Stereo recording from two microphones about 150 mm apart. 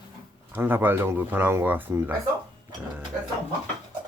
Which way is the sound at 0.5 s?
15° right (ahead or behind).